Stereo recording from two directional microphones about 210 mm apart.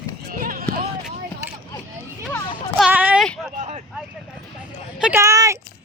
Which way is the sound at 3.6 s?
35° right (ahead or behind).